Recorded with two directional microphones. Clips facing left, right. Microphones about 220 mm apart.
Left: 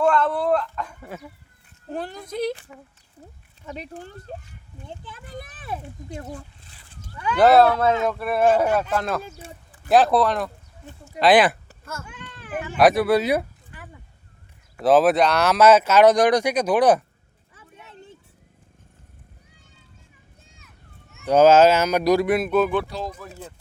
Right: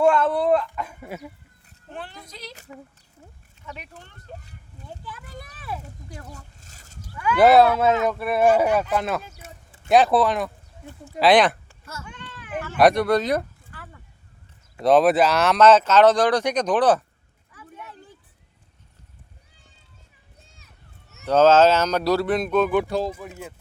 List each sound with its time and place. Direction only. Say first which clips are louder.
0.0 s speech: right 2 dB; 5° right (ahead or behind)
1.9 s speech: left 8 dB; 40° left (ahead or behind)
3.7 s speech: left 6 dB; 35° left (ahead or behind)
4.9 s a child's voice: left 1 dB; 25° left (ahead or behind)
6.3 s a sound: left 7 dB; 45° right (ahead or behind)
7.3 s speech: even; centre (ahead or behind)
9.4 s a sound: left 3 dB; 30° left (ahead or behind)
9.9 s speech: even; centre (ahead or behind)
11.7 s cat: left 3 dB; 50° left (ahead or behind)
12.7 s speech: even; 5° left (ahead or behind)
14.8 s speech: even; centre (ahead or behind)
17.5 s a sound: right 4 dB; 25° left (ahead or behind)
21.2 s speech: left 1 dB; 10° left (ahead or behind)
22.9 s speech: right 7 dB; 50° right (ahead or behind)